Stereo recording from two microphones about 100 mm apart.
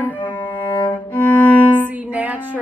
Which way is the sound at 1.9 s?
15° right (ahead or behind).